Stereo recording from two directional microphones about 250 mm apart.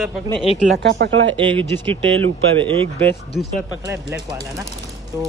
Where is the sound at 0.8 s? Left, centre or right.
Right.